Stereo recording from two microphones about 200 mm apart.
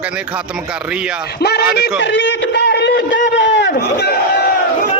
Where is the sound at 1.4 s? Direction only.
55° left (ahead or behind).